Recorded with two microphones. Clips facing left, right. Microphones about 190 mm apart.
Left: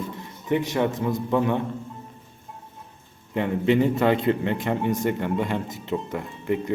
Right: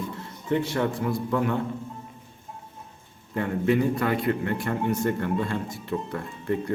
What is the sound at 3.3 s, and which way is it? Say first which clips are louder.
A man's voice: left 2 dB; 20° left (ahead or behind).